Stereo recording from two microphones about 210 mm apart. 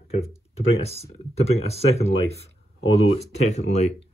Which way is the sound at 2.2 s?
50° right (ahead or behind).